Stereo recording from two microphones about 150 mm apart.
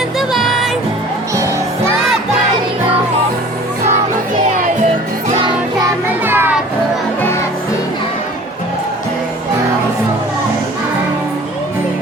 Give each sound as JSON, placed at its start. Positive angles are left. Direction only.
{"t": 0.2, "sound": "music", "side_deg": 0}
{"t": 5.4, "sound": "music", "side_deg": -30}
{"t": 6.2, "sound": "children playing", "side_deg": -15}